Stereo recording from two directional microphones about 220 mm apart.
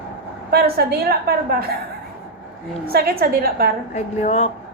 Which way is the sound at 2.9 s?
45° right (ahead or behind).